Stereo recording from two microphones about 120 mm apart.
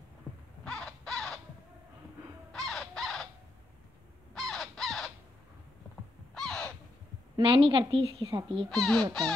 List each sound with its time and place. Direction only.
0.7 s crow: 5° left (ahead or behind)
2.5 s crow: centre (ahead or behind)
4.3 s crow: centre (ahead or behind)
6.3 s crow: 5° left (ahead or behind)
7.3 s a woman's voice: 50° right (ahead or behind)
8.6 s speech: 5° left (ahead or behind)